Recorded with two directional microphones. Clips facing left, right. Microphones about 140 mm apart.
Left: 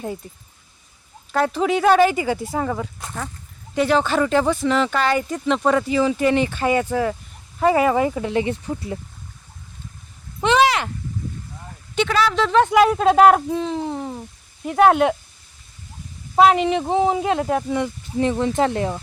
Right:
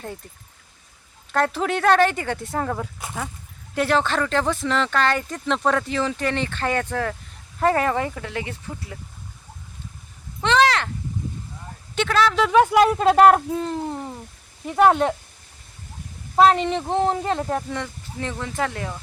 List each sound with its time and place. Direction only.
1.3 s speech: centre (ahead or behind); by 9.0 s 20° left (ahead or behind)
10.4 s a sound: 10° left (ahead or behind)
11.9 s speech: centre (ahead or behind)
16.3 s speech: 10° left (ahead or behind); by 19.0 s 25° left (ahead or behind)